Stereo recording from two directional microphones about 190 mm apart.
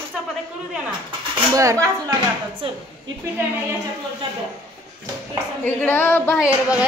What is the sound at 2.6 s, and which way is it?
Speech, 25° right (ahead or behind).